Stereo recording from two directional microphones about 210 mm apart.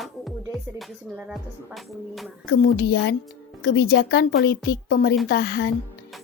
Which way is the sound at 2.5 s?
55° left (ahead or behind).